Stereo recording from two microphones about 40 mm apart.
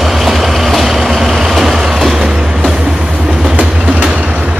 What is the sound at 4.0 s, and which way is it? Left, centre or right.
Vehicle, right.